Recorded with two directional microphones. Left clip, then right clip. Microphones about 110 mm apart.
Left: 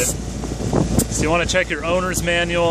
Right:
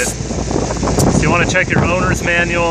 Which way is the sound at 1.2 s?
25° left (ahead or behind).